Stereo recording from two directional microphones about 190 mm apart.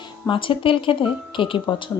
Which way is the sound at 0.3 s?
25° left (ahead or behind).